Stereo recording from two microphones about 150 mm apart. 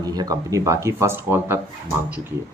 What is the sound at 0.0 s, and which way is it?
Speech, 25° right (ahead or behind).